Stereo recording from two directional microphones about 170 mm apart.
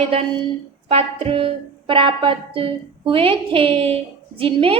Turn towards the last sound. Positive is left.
turn(degrees=-30)  # may be behind; listen again after turning